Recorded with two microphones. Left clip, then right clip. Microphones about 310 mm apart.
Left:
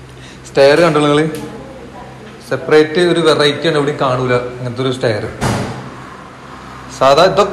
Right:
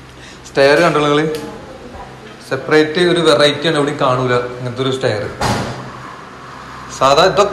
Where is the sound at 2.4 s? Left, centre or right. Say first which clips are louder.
Left 2 dB; centre.